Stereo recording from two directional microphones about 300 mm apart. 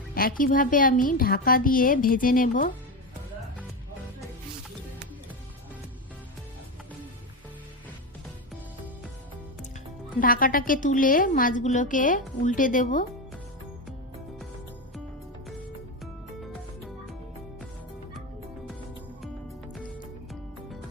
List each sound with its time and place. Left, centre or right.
0.1 s a woman's voice: left
10.2 s a woman's voice: left
16.4 s music: centre